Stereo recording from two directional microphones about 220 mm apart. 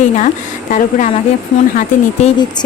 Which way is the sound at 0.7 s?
35° left (ahead or behind).